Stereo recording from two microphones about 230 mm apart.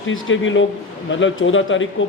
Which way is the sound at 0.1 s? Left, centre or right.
Left.